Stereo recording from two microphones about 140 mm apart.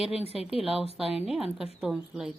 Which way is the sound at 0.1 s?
45° left (ahead or behind).